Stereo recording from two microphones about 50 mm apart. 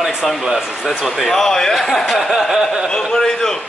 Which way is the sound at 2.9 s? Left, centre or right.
Centre.